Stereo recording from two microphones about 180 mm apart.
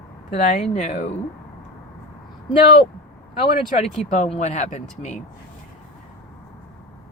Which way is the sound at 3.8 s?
35° left (ahead or behind).